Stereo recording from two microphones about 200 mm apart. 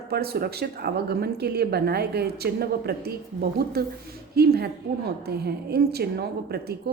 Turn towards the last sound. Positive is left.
turn(degrees=-55)  # may be behind; listen again after turning